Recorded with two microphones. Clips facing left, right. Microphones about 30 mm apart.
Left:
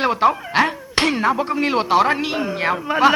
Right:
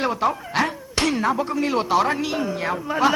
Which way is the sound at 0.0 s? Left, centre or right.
Left.